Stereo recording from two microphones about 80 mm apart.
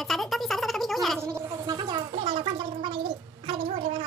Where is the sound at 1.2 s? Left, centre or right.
Right.